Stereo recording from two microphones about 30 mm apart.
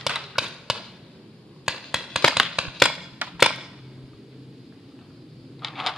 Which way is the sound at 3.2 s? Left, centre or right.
Right.